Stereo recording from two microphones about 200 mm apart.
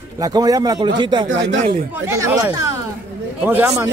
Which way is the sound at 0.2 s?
20° right (ahead or behind).